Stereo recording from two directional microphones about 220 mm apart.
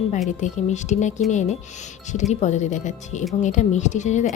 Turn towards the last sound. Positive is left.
turn(degrees=30)  # may be behind; listen again after turning